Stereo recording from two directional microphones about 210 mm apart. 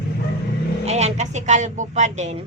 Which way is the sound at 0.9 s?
30° right (ahead or behind).